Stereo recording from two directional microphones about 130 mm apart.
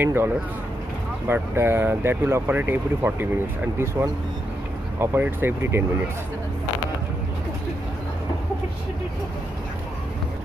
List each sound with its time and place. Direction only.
0.0 s speech: 15° right (ahead or behind)